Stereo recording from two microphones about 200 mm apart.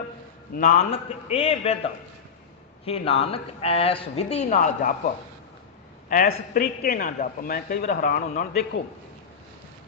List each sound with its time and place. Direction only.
0.5 s a man's voice: 45° left (ahead or behind)
0.8 s a man's voice: 30° left (ahead or behind)
6.1 s a woman's voice: 45° left (ahead or behind)